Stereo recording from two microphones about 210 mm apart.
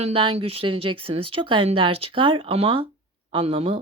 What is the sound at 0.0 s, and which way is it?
A woman's voice, 25° right (ahead or behind).